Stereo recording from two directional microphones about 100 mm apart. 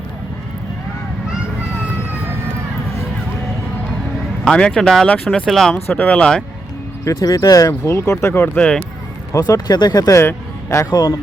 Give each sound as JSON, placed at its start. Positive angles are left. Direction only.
{"t": 4.4, "sound": "speech", "side_deg": 10}
{"t": 5.5, "sound": "speech", "side_deg": 0}
{"t": 5.7, "sound": "speech", "side_deg": 20}
{"t": 7.0, "sound": "speech", "side_deg": 30}
{"t": 9.3, "sound": "speech", "side_deg": 35}
{"t": 10.2, "sound": "speech", "side_deg": 25}